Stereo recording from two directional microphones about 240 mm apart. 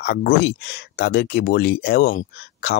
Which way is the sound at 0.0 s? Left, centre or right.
Left.